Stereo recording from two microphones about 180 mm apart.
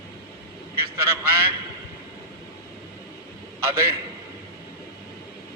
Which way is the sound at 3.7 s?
15° right (ahead or behind).